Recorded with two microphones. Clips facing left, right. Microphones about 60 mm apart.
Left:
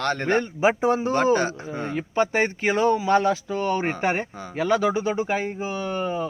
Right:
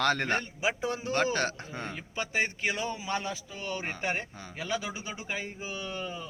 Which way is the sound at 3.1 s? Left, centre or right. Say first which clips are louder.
Left 14 dB; left.